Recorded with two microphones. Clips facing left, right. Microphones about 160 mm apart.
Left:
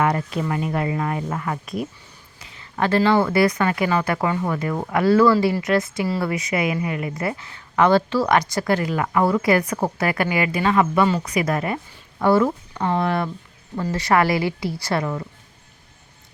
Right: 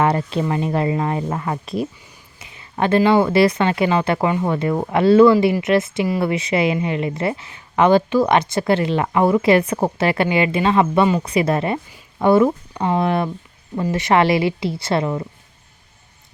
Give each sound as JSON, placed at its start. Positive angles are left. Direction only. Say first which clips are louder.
{"t": 0.0, "sound": "speech", "louder": "right 3 dB", "side_deg": -30}